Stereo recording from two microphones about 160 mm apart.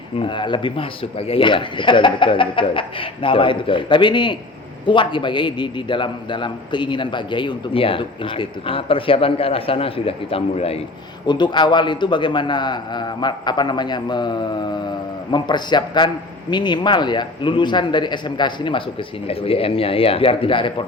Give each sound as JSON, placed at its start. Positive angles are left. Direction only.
{"t": 0.2, "sound": "a man's voice", "side_deg": 30}
{"t": 11.3, "sound": "a man's voice", "side_deg": 30}